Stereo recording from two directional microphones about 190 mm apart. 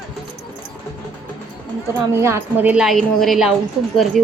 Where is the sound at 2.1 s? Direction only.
15° right (ahead or behind).